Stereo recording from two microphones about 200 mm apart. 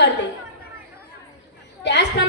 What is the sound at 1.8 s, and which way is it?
Speech, 60° left (ahead or behind).